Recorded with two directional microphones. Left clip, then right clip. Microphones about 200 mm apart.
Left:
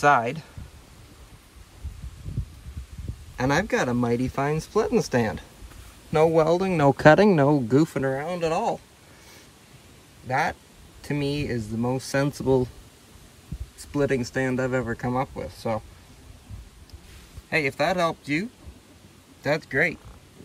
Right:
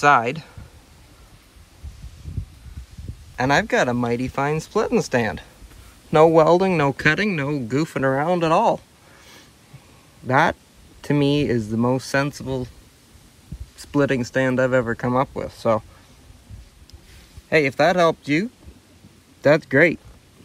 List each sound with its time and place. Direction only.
0.0 s speech: 10° left (ahead or behind)
3.3 s speech: 10° left (ahead or behind)
7.0 s speech: 20° left (ahead or behind)
8.0 s speech: 5° right (ahead or behind)
10.3 s speech: centre (ahead or behind)
12.3 s speech: 20° left (ahead or behind)
13.7 s speech: 5° left (ahead or behind)
17.5 s speech: centre (ahead or behind)